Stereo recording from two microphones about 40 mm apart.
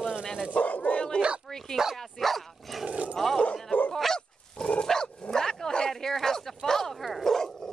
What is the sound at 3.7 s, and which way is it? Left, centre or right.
Dog, left.